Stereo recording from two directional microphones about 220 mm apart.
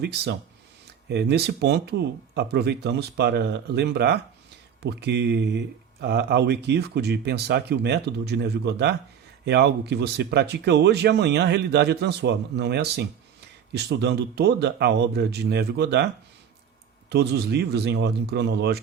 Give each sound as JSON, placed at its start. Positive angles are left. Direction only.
{"t": 0.0, "sound": "speech", "side_deg": -45}
{"t": 17.1, "sound": "speech", "side_deg": -50}